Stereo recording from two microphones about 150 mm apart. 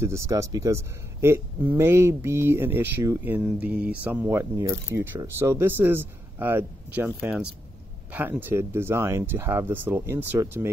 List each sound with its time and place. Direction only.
0.0 s a man's voice: 20° right (ahead or behind)